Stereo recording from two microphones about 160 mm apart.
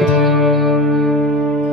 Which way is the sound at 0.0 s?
Centre (ahead or behind).